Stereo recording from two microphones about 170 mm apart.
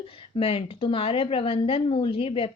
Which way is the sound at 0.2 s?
35° left (ahead or behind).